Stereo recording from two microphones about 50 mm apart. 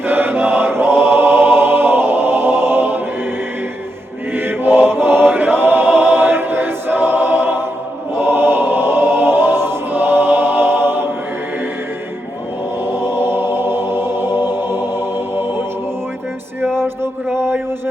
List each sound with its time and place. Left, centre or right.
0.0 s choir: right
4.3 s choir: right
12.8 s music: right
17.3 s a sound: right